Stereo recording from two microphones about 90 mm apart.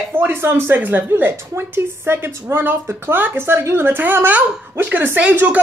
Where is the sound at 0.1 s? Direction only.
25° right (ahead or behind).